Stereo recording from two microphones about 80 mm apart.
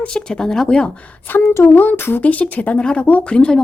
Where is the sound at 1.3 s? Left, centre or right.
Left.